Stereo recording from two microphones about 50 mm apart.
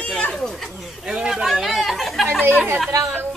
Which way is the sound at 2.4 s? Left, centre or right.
Right.